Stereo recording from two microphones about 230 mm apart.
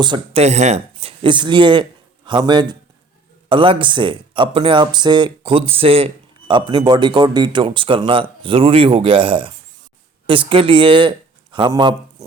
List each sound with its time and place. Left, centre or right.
0.0 s speech: right